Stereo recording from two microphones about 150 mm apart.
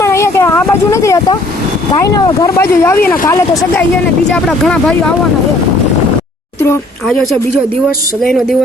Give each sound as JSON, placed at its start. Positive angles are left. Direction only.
{"t": 0.0, "sound": "a sound", "side_deg": 20}
{"t": 2.2, "sound": "speech", "side_deg": 20}
{"t": 4.3, "sound": "speech", "side_deg": 5}
{"t": 8.2, "sound": "speech", "side_deg": 0}